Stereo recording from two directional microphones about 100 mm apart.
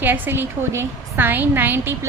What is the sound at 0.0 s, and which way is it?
A woman's voice, 20° right (ahead or behind).